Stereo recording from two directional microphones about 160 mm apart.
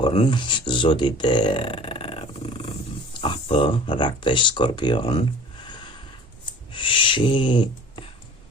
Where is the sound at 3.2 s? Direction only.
35° left (ahead or behind).